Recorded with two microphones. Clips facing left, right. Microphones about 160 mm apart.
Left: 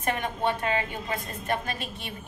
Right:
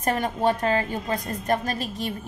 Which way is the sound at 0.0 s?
40° right (ahead or behind).